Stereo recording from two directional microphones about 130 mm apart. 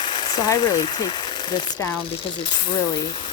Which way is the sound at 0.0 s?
40° left (ahead or behind).